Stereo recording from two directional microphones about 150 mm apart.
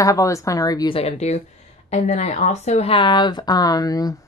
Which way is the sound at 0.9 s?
45° left (ahead or behind).